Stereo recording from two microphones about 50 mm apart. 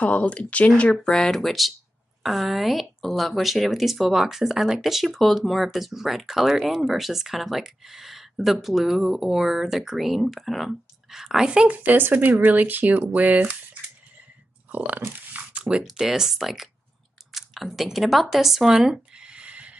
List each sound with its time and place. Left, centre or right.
0.0 s speech: left
1.0 s speech: centre
11.5 s speech: right
14.7 s a sound: right
16.0 s speech: centre
18.8 s a sound: centre